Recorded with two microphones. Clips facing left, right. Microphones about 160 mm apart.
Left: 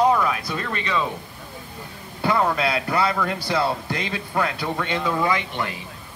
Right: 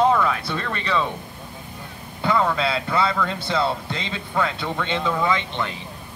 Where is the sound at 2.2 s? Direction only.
15° left (ahead or behind).